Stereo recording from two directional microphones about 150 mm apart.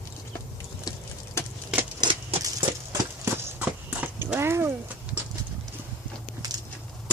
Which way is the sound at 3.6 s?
10° right (ahead or behind).